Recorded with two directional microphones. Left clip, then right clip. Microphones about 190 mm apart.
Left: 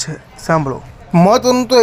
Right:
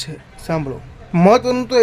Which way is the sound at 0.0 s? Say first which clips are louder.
Left 5 dB; centre (ahead or behind).